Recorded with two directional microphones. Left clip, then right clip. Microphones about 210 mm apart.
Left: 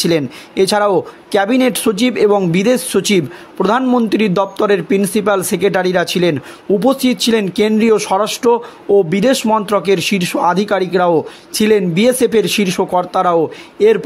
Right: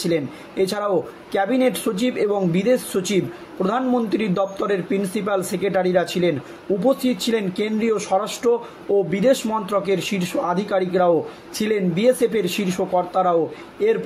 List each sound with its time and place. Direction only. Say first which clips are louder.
0.0 s speech: left 7 dB; 50° left (ahead or behind)